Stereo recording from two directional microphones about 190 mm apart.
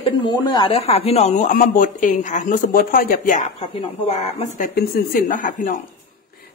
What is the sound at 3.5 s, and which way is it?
Speech, 35° left (ahead or behind).